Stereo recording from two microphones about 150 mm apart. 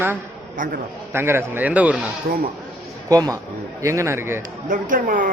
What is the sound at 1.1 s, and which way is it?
Speech, 15° right (ahead or behind).